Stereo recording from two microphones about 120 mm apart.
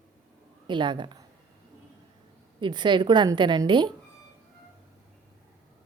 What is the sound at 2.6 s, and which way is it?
A woman's voice, 40° right (ahead or behind).